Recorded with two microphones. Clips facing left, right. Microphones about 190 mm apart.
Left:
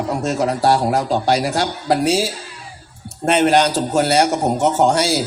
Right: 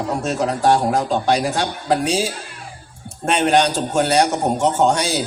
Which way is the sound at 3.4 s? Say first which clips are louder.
Even; 35° left (ahead or behind).